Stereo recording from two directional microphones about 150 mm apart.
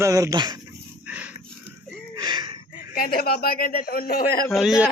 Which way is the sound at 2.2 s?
30° right (ahead or behind).